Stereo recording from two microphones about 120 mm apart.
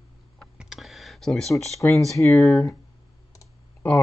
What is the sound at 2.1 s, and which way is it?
Speech, 25° left (ahead or behind).